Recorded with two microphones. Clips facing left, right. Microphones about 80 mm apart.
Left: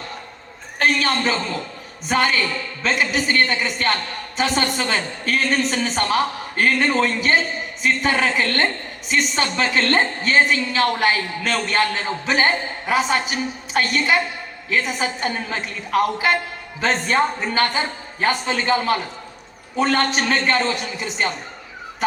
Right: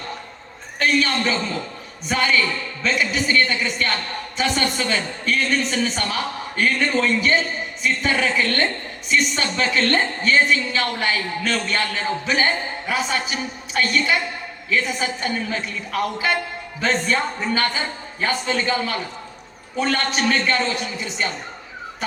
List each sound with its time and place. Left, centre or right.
0.8 s a woman's voice: left